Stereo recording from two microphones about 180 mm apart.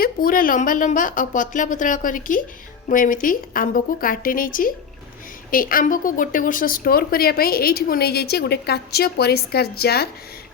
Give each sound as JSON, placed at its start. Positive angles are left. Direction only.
{"t": 0.0, "sound": "a woman's voice", "side_deg": 50}